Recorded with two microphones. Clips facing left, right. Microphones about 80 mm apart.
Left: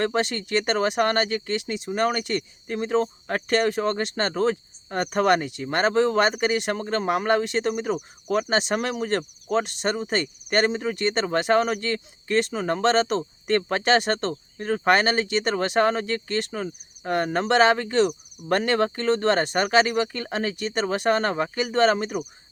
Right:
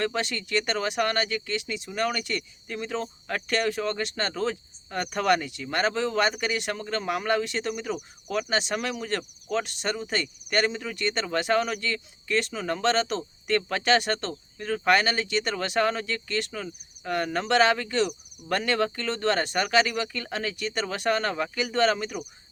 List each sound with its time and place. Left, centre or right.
0.0 s speech: left